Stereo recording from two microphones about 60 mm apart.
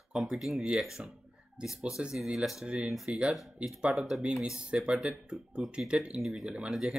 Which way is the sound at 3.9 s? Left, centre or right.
Centre.